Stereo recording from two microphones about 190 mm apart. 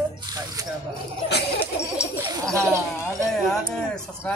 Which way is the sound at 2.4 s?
15° right (ahead or behind).